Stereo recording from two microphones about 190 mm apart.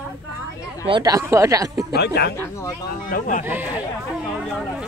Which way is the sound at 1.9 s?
60° left (ahead or behind).